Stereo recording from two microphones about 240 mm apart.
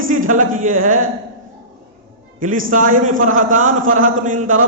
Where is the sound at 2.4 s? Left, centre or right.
Right.